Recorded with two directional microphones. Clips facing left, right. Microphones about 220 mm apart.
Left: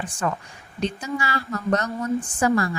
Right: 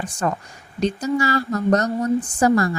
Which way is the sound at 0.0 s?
40° right (ahead or behind).